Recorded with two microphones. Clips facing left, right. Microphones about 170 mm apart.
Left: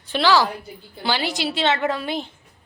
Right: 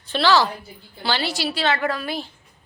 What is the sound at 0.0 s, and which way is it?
A woman's voice, 15° left (ahead or behind).